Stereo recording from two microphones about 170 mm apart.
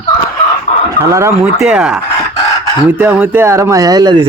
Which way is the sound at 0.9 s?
20° right (ahead or behind).